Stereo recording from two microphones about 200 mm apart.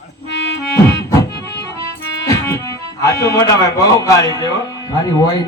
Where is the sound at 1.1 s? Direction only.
15° left (ahead or behind).